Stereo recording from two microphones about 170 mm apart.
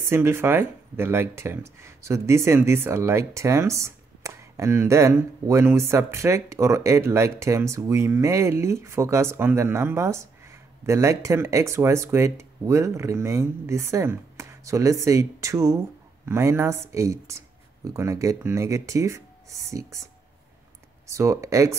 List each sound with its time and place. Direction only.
0.0 s speech: 15° right (ahead or behind)
21.1 s speech: 20° right (ahead or behind)